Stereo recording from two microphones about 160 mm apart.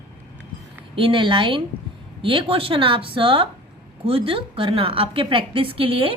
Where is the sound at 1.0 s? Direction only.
30° right (ahead or behind).